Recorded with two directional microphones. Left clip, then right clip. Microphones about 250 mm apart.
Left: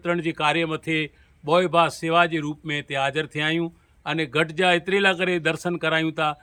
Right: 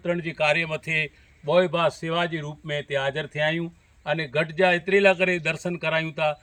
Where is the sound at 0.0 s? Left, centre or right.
Left.